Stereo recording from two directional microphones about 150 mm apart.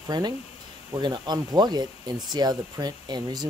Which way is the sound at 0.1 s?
25° right (ahead or behind).